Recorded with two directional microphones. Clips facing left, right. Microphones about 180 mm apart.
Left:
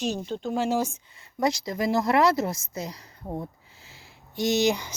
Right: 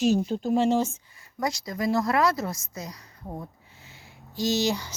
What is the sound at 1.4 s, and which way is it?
Speech, 20° left (ahead or behind).